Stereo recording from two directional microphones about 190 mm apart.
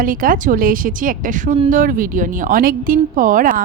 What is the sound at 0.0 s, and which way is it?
A woman's voice, 45° right (ahead or behind).